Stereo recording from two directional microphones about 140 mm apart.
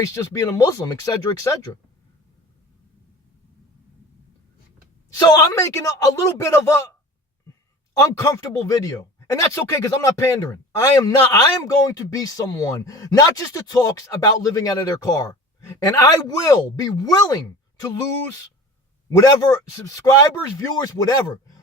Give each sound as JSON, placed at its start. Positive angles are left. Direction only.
{"t": 0.0, "sound": "speech", "side_deg": 20}
{"t": 5.1, "sound": "speech", "side_deg": 25}
{"t": 8.0, "sound": "speech", "side_deg": 25}
{"t": 19.1, "sound": "speech", "side_deg": 25}